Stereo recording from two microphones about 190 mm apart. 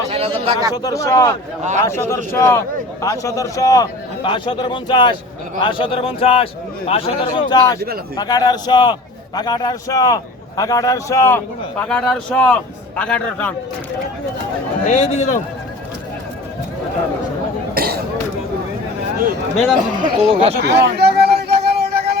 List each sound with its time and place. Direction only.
0.1 s speech: 30° right (ahead or behind)
0.7 s a man's voice: 20° left (ahead or behind)
14.8 s a man's voice: 35° left (ahead or behind)
17.7 s a sound: 55° right (ahead or behind)
20.1 s speech: 30° right (ahead or behind)
20.6 s a sound: 60° right (ahead or behind)